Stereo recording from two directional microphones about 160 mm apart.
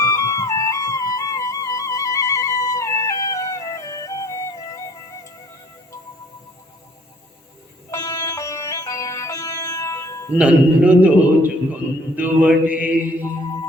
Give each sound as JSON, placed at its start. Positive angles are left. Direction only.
{"t": 0.0, "sound": "music", "side_deg": 20}
{"t": 7.9, "sound": "music", "side_deg": 20}
{"t": 10.3, "sound": "a man's voice", "side_deg": -10}